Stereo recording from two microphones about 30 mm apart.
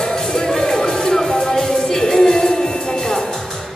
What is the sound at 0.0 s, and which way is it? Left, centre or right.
Music, centre.